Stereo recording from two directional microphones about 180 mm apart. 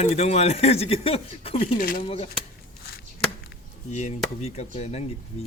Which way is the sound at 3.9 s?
40° left (ahead or behind).